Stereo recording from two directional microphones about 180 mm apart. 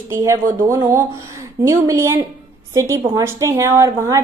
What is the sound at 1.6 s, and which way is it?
A woman's voice, 15° right (ahead or behind).